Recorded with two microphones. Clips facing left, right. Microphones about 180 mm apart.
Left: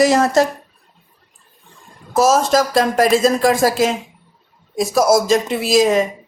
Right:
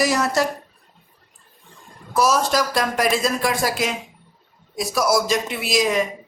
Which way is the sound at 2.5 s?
25° left (ahead or behind).